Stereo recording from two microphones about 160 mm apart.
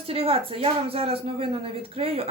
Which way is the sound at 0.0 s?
35° right (ahead or behind).